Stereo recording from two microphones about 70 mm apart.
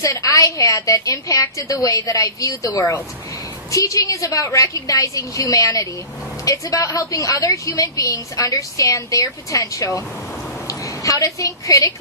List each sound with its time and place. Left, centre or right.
0.0 s a woman's voice: left
2.7 s speech: left
3.7 s a woman's voice: left